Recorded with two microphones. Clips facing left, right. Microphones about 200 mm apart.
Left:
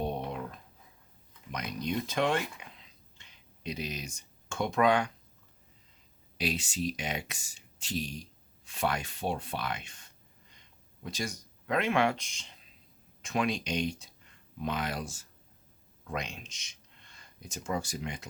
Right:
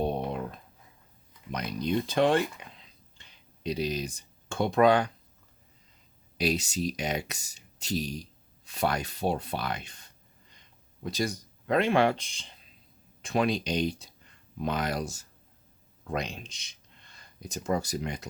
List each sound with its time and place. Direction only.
1.5 s speech: 35° right (ahead or behind)
6.3 s speech: 40° right (ahead or behind)